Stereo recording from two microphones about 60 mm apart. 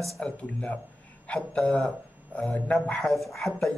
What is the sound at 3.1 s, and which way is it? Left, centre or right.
Speech, centre.